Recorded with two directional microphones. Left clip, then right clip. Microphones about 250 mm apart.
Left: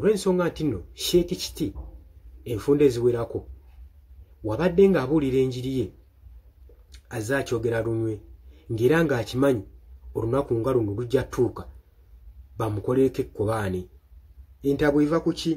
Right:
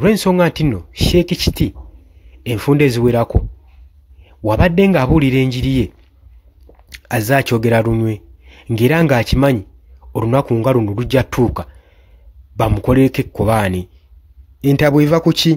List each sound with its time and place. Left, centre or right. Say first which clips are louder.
0.0 s speech: right 9 dB; right
4.5 s speech: right 6 dB; right
6.9 s speech: right 12 dB; right